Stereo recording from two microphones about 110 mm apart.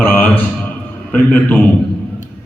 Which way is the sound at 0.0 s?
15° left (ahead or behind).